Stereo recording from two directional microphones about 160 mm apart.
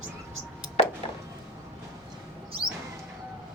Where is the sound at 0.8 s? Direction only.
40° left (ahead or behind).